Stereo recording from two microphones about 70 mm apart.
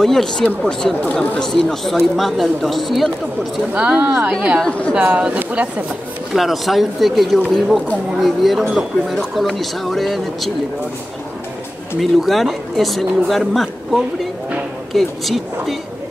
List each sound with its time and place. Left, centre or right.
0.0 s speech: centre
3.7 s speech: centre
4.6 s speech: centre
4.9 s speech: centre
6.3 s speech: centre
12.0 s speech: centre